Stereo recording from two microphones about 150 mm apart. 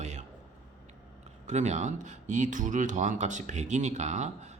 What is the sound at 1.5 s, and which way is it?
Speech, 50° right (ahead or behind).